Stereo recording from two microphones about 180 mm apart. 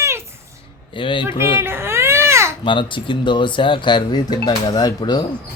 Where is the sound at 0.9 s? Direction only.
30° left (ahead or behind).